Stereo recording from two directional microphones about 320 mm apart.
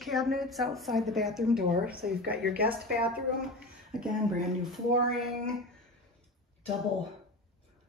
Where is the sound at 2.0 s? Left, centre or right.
Right.